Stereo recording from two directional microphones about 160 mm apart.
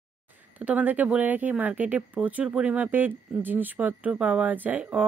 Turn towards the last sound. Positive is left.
turn(degrees=-10)  # may be behind; listen again after turning